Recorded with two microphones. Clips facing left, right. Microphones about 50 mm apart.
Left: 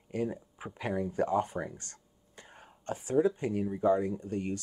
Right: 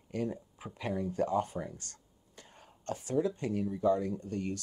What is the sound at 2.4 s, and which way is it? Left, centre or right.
Wail, centre.